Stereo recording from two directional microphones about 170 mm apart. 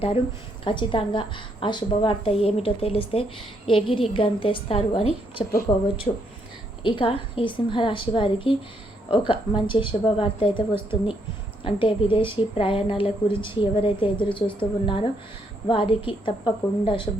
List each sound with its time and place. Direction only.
0.6 s a woman's voice: 30° left (ahead or behind)
5.7 s a woman's voice: 20° left (ahead or behind)